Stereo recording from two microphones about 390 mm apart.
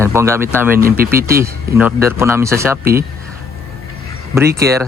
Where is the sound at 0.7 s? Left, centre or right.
Right.